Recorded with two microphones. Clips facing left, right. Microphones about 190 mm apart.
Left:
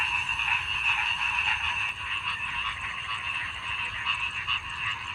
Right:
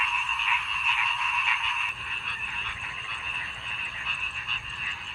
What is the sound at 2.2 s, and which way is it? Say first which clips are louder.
Frog: left 4 dB; 50° right (ahead or behind).